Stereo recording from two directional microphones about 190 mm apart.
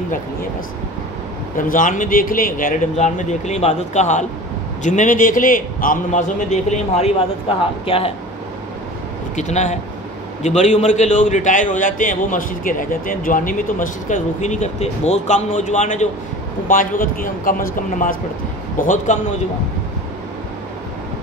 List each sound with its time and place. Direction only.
1.6 s a man's voice: 45° left (ahead or behind)
9.3 s a man's voice: 40° left (ahead or behind)